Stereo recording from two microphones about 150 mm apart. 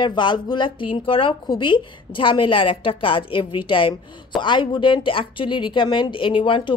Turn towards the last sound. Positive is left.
turn(degrees=35)  # may be behind; listen again after turning